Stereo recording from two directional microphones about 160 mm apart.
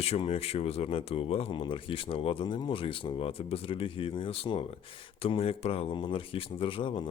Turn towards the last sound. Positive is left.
turn(degrees=30)  # may be behind; listen again after turning